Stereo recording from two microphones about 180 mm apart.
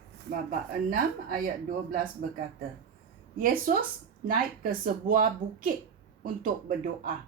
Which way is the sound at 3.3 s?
50° right (ahead or behind).